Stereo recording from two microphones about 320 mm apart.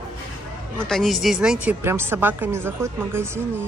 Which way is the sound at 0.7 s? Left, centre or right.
Centre.